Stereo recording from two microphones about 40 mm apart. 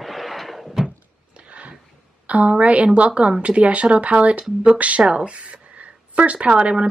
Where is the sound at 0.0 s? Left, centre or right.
Centre.